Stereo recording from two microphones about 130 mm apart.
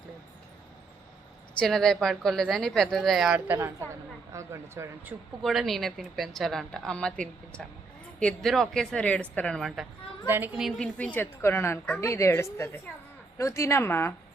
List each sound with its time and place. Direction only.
1.5 s a woman's voice: 5° left (ahead or behind)
3.3 s a woman's voice: 15° right (ahead or behind)
5.4 s a woman's voice: centre (ahead or behind)
10.2 s a woman's voice: 15° right (ahead or behind)
10.8 s a woman's voice: 10° left (ahead or behind)